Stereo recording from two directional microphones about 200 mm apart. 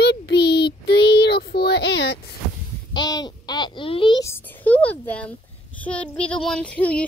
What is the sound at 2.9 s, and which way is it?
A child's voice, 20° left (ahead or behind).